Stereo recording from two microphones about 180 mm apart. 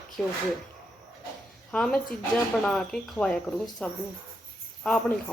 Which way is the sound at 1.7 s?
5° left (ahead or behind).